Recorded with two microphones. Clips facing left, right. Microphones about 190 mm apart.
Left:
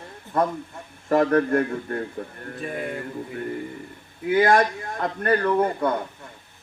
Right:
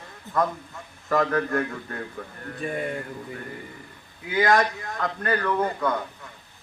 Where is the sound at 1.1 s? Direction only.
30° left (ahead or behind).